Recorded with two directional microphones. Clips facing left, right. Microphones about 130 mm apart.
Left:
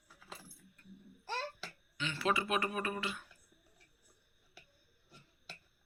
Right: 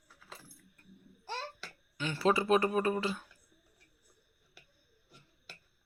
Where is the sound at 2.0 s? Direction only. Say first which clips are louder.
Right 5 dB; 40° right (ahead or behind).